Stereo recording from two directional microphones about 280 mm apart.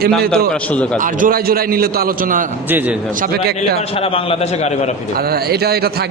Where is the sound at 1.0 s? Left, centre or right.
Right.